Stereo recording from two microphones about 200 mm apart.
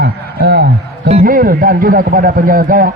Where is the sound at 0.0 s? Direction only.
55° right (ahead or behind).